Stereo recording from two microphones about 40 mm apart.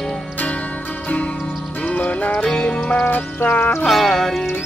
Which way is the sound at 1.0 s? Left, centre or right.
Left.